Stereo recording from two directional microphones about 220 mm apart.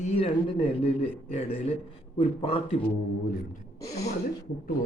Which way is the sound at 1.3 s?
25° left (ahead or behind).